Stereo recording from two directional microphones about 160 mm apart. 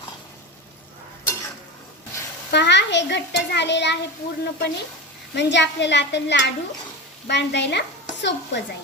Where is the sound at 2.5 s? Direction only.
90° left.